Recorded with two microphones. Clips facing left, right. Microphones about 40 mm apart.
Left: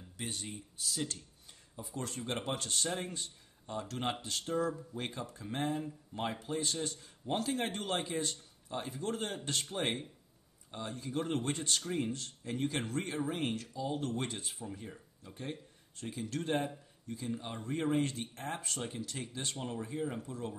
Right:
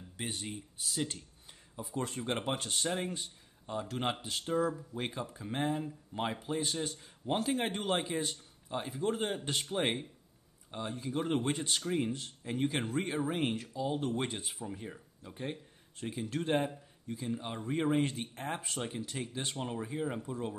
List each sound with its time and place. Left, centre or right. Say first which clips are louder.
0.2 s speech: right 2 dB; right